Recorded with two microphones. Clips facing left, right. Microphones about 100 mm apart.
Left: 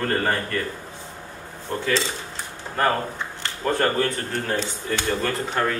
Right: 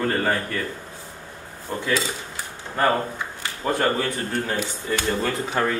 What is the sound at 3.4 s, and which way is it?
Speech, 15° right (ahead or behind).